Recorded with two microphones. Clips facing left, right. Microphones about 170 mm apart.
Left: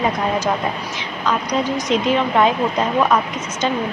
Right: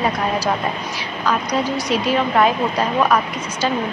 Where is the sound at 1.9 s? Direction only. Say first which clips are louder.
Left 1 dB; 20° left (ahead or behind).